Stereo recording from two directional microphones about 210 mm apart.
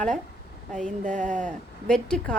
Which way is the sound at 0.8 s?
35° right (ahead or behind).